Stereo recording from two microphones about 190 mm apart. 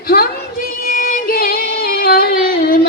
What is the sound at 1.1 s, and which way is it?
Singing, 50° left (ahead or behind).